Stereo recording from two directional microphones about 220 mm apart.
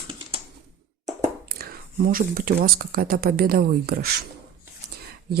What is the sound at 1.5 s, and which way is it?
Speech, 45° right (ahead or behind).